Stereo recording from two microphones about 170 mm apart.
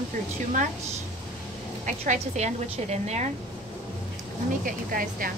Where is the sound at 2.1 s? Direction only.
40° right (ahead or behind).